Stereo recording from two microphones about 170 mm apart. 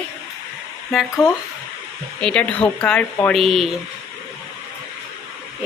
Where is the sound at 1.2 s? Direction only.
5° right (ahead or behind).